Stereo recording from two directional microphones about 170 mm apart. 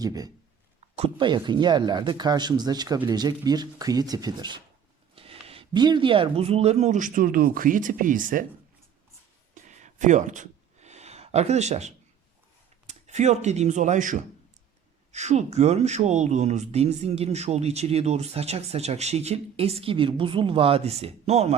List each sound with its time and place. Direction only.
0.0 s speech: 20° right (ahead or behind)
0.8 s speech: 35° right (ahead or behind); by 8.4 s 50° right (ahead or behind)
9.6 s a sound: 45° right (ahead or behind)
12.9 s speech: 45° right (ahead or behind)